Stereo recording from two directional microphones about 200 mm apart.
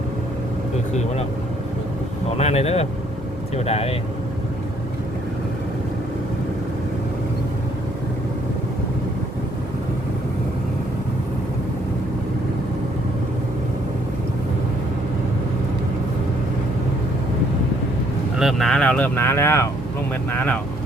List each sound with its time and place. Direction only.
2.4 s speech: 30° left (ahead or behind)
18.3 s speech: centre (ahead or behind)